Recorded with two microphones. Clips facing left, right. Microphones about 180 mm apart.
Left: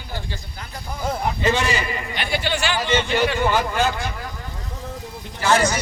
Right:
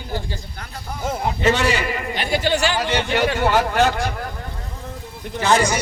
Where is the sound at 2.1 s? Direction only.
40° right (ahead or behind).